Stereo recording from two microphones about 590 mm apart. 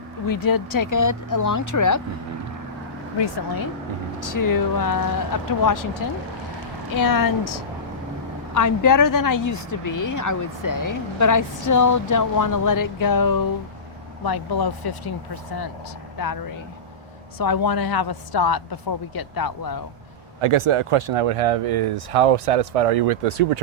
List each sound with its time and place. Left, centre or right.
0.3 s speech: left
3.2 s a woman's voice: left
6.9 s a woman's voice: left
8.5 s a woman's voice: left
16.1 s a woman's voice: left
20.4 s speech: right